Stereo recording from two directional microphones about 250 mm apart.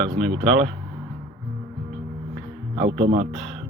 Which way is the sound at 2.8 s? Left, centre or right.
Right.